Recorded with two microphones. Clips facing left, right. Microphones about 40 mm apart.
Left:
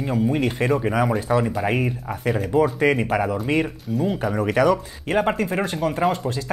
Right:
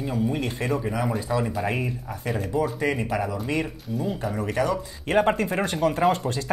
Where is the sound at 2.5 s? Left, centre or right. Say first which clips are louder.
Left 6 dB; left.